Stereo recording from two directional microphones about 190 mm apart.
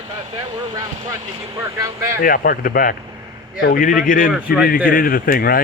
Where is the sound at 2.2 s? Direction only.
50° left (ahead or behind).